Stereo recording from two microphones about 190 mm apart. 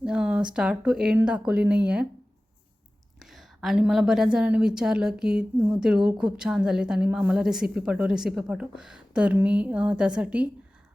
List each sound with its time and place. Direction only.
0.0 s a woman's voice: 5° right (ahead or behind)
3.2 s a woman's voice: centre (ahead or behind)